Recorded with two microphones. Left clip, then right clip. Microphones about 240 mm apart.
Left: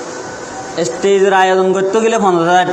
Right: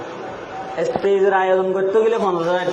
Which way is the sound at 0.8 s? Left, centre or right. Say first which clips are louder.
Left 5 dB; left.